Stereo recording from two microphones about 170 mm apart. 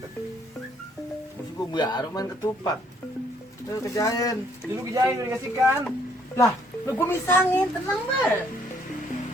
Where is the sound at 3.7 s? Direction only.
20° left (ahead or behind).